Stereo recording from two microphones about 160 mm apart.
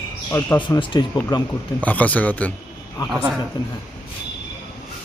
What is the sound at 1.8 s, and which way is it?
Speech, 10° left (ahead or behind).